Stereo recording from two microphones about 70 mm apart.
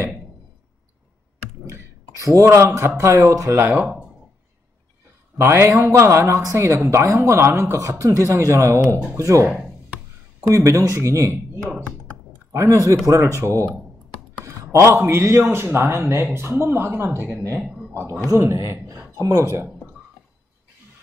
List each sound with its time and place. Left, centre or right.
1.7 s a sound: right
3.0 s speech: right
3.7 s speech: centre
5.4 s a woman's voice: right
5.7 s speech: right
8.8 s a woman's voice: right
9.1 s speech: right
10.5 s speech: right
12.5 s a man's voice: right